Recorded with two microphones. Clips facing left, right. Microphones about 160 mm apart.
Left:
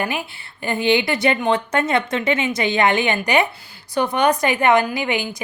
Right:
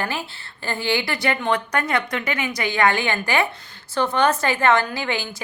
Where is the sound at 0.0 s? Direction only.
15° left (ahead or behind).